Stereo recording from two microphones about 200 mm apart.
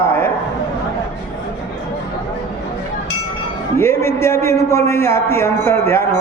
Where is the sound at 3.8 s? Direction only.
15° left (ahead or behind).